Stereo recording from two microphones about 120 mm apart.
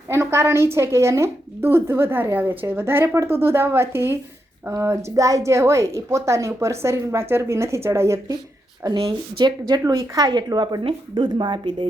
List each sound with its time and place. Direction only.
0.1 s a woman's voice: 20° right (ahead or behind); by 11.9 s 40° right (ahead or behind)